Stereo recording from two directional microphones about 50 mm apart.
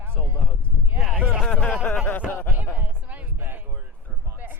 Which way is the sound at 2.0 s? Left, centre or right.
Left.